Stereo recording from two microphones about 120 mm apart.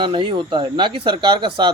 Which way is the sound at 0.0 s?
45° right (ahead or behind).